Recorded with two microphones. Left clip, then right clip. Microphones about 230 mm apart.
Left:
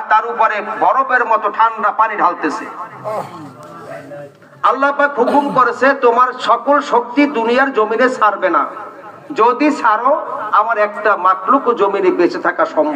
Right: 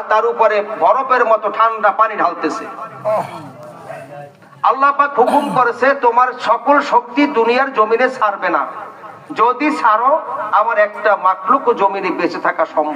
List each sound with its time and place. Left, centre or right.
0.1 s a man's voice: centre
0.7 s a man's voice: centre
4.6 s a man's voice: right